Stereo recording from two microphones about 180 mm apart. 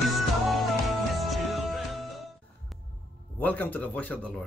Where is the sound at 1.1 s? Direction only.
Centre (ahead or behind).